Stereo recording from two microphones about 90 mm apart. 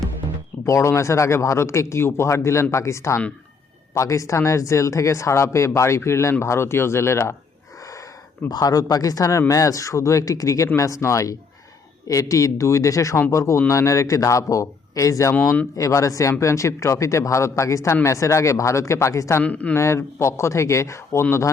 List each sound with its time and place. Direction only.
0.6 s speech: 35° left (ahead or behind)
8.4 s speech: 45° left (ahead or behind)
19.4 s speech: 15° left (ahead or behind)
19.7 s speech: 30° left (ahead or behind)